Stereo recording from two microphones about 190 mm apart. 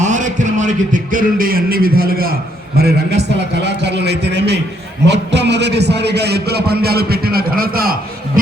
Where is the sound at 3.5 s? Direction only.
65° right (ahead or behind).